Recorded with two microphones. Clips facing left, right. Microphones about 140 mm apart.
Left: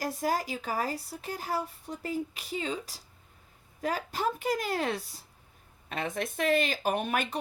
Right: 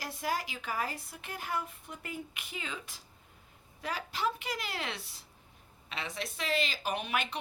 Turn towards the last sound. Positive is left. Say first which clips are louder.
# left 4 dB
turn(degrees=45)  # may be behind; listen again after turning